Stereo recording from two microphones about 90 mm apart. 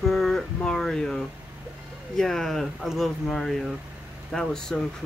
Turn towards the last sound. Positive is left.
turn(degrees=5)  # may be behind; listen again after turning